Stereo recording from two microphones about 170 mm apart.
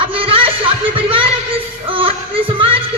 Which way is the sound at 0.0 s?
35° right (ahead or behind).